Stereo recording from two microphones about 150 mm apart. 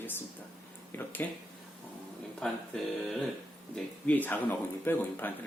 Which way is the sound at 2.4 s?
5° left (ahead or behind).